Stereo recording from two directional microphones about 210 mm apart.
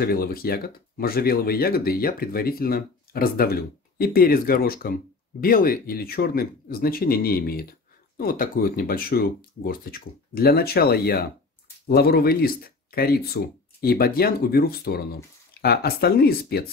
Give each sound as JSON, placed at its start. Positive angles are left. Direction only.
{"t": 0.0, "sound": "speech", "side_deg": 45}